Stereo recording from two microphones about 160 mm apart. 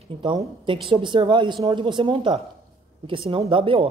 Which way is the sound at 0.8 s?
30° right (ahead or behind).